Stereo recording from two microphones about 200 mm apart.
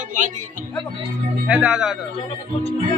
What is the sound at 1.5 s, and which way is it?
Speech, 5° right (ahead or behind).